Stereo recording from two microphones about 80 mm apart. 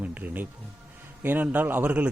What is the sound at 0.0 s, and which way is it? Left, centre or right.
Music, centre.